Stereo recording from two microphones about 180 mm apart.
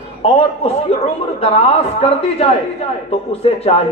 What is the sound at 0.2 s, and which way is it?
A man's voice, 35° left (ahead or behind).